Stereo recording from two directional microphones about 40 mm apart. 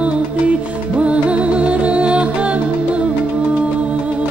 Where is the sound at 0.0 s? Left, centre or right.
Right.